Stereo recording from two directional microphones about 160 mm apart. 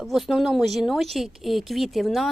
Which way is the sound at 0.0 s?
Centre (ahead or behind).